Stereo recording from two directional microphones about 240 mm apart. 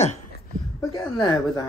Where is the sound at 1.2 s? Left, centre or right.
Centre.